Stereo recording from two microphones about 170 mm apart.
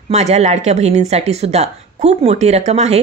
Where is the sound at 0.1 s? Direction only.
40° right (ahead or behind).